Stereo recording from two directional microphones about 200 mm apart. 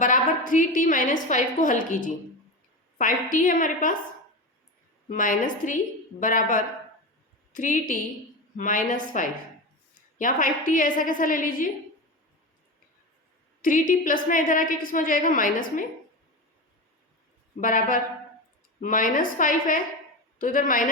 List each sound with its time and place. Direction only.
0.0 s a woman's voice: 40° left (ahead or behind)
5.0 s a woman's voice: 40° left (ahead or behind)
13.6 s a woman's voice: 40° left (ahead or behind)
17.6 s a woman's voice: 40° left (ahead or behind)